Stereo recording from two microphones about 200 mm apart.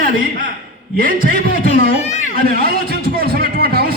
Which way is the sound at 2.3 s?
50° right (ahead or behind).